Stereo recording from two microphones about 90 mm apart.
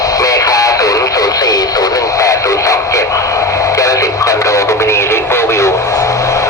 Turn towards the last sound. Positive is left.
turn(degrees=35)  # may be behind; listen again after turning